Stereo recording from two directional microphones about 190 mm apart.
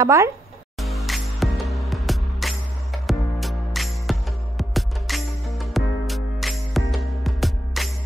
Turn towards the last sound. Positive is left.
turn(degrees=0)  # may be behind; listen again after turning